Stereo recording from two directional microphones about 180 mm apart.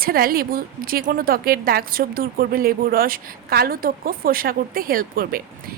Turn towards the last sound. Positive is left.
turn(degrees=-50)  # may be behind; listen again after turning